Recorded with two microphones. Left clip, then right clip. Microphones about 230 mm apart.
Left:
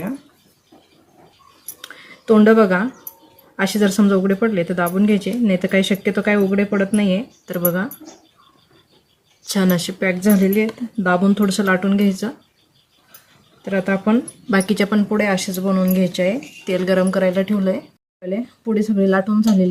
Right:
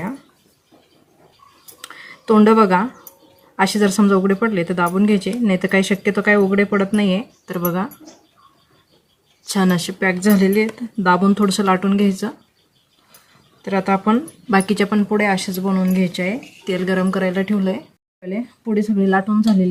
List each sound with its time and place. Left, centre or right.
2.2 s speech: centre
9.5 s speech: centre
13.6 s speech: centre